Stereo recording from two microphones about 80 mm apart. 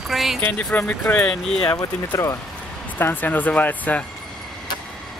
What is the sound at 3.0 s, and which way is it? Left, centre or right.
A man's voice, left.